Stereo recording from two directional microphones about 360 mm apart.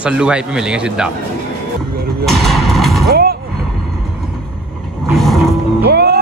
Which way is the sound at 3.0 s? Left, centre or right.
Right.